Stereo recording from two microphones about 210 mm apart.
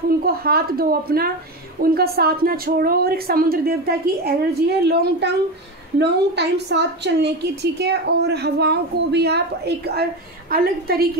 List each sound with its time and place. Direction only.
0.2 s a woman's voice: 45° right (ahead or behind)